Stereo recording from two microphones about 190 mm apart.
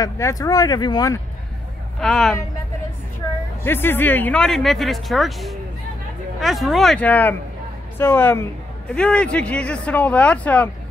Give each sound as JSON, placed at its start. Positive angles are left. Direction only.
{"t": 0.0, "sound": "speech", "side_deg": 20}
{"t": 2.0, "sound": "speech", "side_deg": 5}
{"t": 3.6, "sound": "a man's voice", "side_deg": 10}